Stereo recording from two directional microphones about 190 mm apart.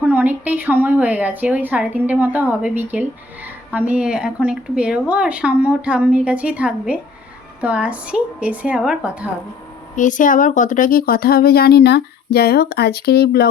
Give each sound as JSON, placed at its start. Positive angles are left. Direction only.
{"t": 0.0, "sound": "speech", "side_deg": -10}
{"t": 9.9, "sound": "speech", "side_deg": 40}